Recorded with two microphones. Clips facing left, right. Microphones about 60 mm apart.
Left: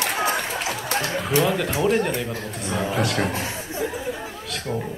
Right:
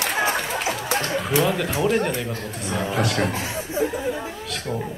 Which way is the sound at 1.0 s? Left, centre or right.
Centre.